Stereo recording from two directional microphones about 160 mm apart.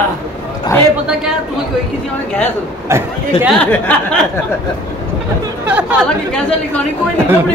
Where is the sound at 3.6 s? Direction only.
10° left (ahead or behind).